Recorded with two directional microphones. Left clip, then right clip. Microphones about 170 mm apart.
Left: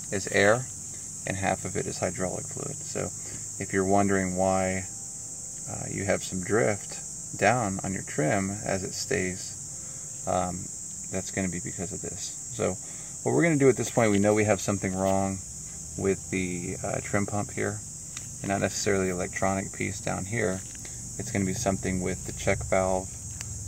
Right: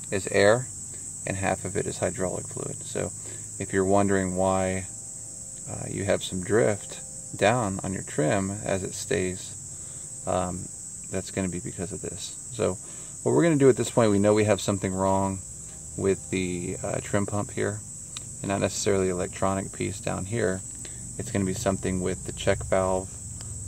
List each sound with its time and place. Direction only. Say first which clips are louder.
0.1 s speech: right 2 dB; 25° right (ahead or behind)
13.2 s speech: right 2 dB; 30° right (ahead or behind)